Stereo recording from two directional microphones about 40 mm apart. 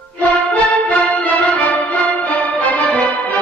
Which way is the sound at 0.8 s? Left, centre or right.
Left.